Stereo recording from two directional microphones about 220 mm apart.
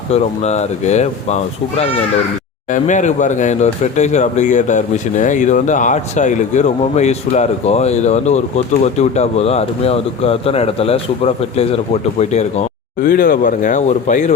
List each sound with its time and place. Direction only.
0.1 s speech: 30° left (ahead or behind)
2.7 s speech: 35° left (ahead or behind)